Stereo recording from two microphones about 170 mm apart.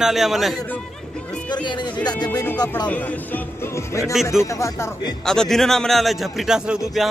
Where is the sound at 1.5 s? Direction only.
25° left (ahead or behind).